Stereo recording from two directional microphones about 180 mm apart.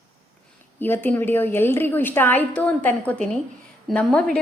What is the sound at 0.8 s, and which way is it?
A woman's voice, 10° left (ahead or behind).